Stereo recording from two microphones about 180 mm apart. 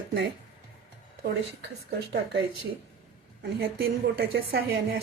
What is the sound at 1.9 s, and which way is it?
Speech, 70° right (ahead or behind).